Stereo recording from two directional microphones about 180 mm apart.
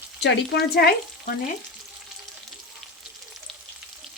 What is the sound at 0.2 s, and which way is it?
Frying, 70° left (ahead or behind).